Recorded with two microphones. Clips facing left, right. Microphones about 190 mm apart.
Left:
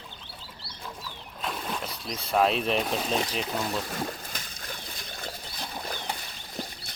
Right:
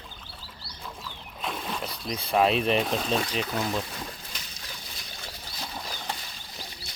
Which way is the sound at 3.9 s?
50° left (ahead or behind).